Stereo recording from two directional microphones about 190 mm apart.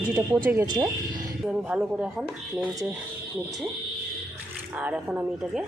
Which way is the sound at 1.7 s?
5° right (ahead or behind).